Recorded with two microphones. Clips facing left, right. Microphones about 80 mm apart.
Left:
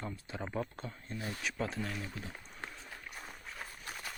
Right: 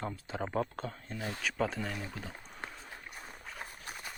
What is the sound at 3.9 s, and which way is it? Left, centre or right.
Run, centre.